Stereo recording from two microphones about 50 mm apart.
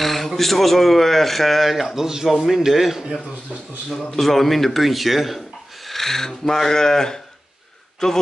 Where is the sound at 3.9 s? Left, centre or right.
Centre.